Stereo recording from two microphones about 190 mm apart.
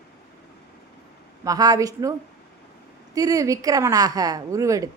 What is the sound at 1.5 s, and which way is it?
Speech, 20° right (ahead or behind).